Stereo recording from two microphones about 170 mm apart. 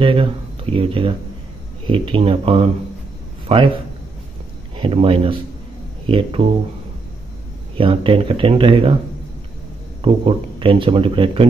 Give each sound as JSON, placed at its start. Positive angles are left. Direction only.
{"t": 0.0, "sound": "a man's voice", "side_deg": -30}
{"t": 4.7, "sound": "speech", "side_deg": -30}
{"t": 7.7, "sound": "speech", "side_deg": -30}
{"t": 10.0, "sound": "speech", "side_deg": -30}